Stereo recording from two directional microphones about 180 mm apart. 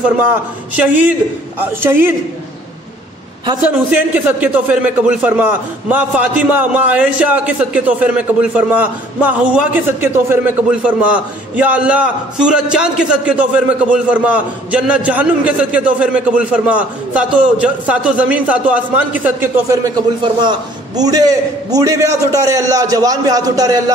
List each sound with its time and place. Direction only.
0.0 s a man's voice: 10° right (ahead or behind)
3.6 s a man's voice: 10° right (ahead or behind)